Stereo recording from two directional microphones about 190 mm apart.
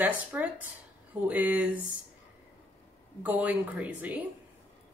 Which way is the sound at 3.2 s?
10° right (ahead or behind).